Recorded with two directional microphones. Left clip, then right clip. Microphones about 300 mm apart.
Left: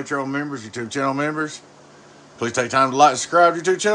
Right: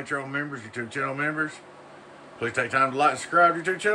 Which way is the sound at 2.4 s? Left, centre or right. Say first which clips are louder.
Left 5 dB; centre.